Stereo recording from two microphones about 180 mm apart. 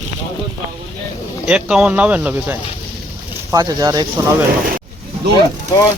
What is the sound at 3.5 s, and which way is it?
Speech, 20° right (ahead or behind).